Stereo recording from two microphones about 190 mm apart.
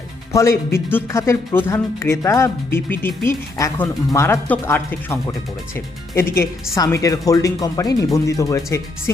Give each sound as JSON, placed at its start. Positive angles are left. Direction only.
{"t": 0.3, "sound": "speech", "side_deg": 15}